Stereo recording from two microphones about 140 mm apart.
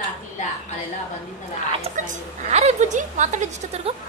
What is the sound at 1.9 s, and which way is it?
A woman's voice, 60° right (ahead or behind).